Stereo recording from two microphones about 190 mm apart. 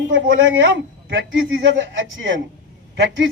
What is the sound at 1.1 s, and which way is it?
A man's voice, 75° right (ahead or behind).